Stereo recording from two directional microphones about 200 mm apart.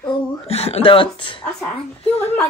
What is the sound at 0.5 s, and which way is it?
Speech, 30° left (ahead or behind).